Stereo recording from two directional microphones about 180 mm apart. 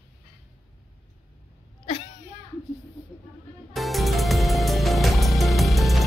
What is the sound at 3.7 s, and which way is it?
Music, centre (ahead or behind).